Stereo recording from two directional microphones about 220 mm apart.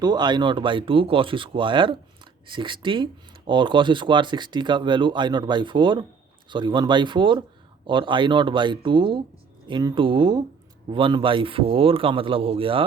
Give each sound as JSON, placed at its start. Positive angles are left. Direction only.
{"t": 0.0, "sound": "speech", "side_deg": -20}